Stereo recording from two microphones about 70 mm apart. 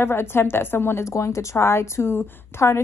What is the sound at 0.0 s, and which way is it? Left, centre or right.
A woman's voice, left.